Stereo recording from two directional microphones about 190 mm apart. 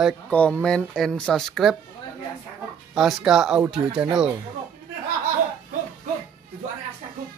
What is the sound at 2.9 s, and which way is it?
Speech, centre (ahead or behind).